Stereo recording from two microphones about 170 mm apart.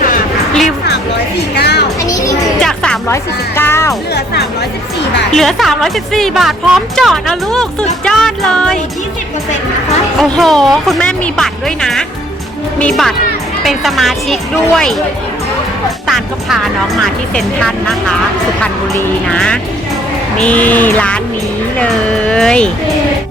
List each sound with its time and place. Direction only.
1.5 s a sound: 75° left (ahead or behind)
2.0 s music: 20° left (ahead or behind)
2.6 s music: 5° left (ahead or behind)
3.1 s speech: 15° left (ahead or behind)
5.4 s a woman's voice: centre (ahead or behind)
10.2 s a woman's voice: centre (ahead or behind)
16.0 s a woman's voice: centre (ahead or behind)